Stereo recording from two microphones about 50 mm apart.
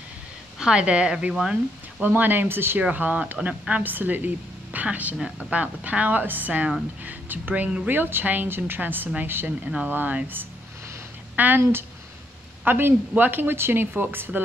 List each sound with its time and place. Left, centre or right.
0.6 s speech: centre
2.0 s a woman's voice: right
2.8 s a woman's voice: right
9.8 s a woman's voice: right
12.6 s a man's voice: right